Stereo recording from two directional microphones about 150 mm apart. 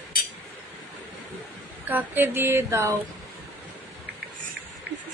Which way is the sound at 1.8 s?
10° right (ahead or behind).